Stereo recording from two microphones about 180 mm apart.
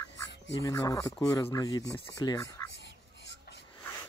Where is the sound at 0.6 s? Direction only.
20° left (ahead or behind).